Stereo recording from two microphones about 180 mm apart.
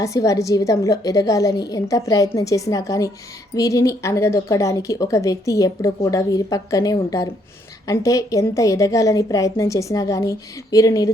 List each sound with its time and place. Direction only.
0.0 s a woman's voice: 20° left (ahead or behind)